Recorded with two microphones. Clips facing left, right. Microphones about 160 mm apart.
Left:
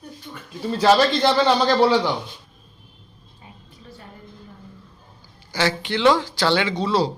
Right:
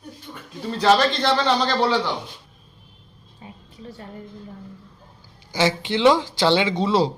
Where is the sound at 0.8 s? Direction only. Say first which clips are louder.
Left 2 dB; 10° left (ahead or behind).